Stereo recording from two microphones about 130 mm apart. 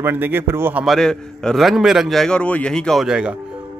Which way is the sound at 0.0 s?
15° right (ahead or behind).